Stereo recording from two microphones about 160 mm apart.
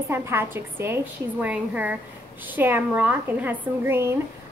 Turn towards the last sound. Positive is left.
turn(degrees=-15)  # may be behind; listen again after turning